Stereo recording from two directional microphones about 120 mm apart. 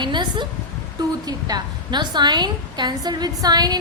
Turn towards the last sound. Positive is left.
turn(degrees=-35)  # may be behind; listen again after turning